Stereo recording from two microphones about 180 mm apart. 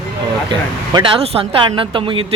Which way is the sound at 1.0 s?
30° right (ahead or behind).